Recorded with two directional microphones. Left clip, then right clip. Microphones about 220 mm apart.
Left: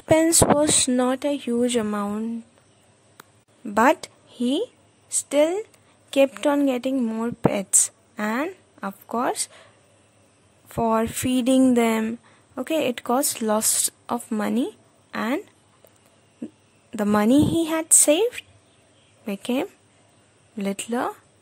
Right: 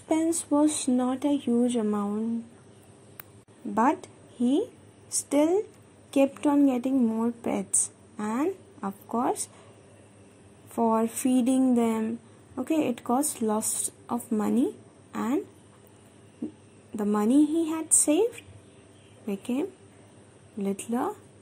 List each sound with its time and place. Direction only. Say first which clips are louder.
0.1 s speech: left 8 dB; 40° left (ahead or behind)
3.7 s a woman's voice: left 6 dB; 35° left (ahead or behind)
10.7 s speech: left 3 dB; 35° left (ahead or behind)
16.9 s a woman's voice: left 5 dB; 40° left (ahead or behind)